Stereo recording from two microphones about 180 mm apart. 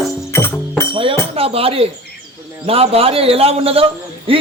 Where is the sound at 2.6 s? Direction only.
35° right (ahead or behind).